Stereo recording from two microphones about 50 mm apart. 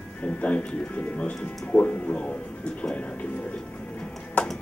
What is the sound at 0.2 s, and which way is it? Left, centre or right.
Speech, left.